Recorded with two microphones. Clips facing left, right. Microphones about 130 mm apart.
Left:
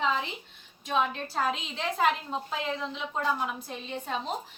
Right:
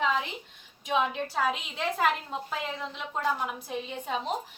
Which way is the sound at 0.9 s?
5° right (ahead or behind).